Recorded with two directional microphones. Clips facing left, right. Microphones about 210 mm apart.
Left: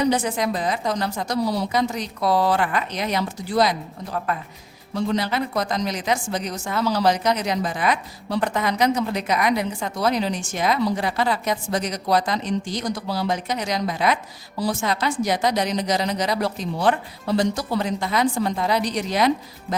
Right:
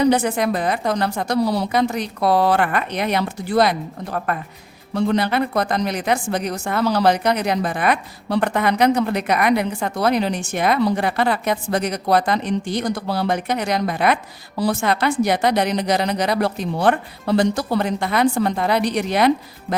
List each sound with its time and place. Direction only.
0.0 s a woman's voice: 60° right (ahead or behind)